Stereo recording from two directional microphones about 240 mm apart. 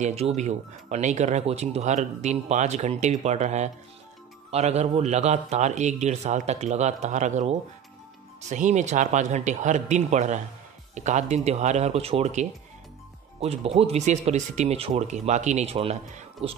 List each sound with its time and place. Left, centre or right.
0.0 s speech: right